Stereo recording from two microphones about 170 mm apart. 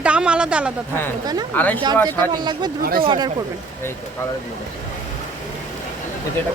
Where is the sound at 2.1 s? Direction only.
25° right (ahead or behind).